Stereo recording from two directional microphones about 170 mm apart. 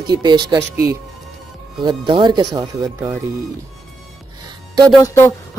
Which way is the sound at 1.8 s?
25° right (ahead or behind).